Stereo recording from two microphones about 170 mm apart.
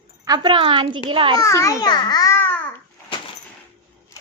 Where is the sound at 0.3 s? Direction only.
30° right (ahead or behind).